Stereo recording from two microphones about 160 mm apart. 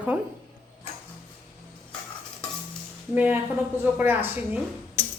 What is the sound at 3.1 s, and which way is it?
A woman's voice, 10° right (ahead or behind).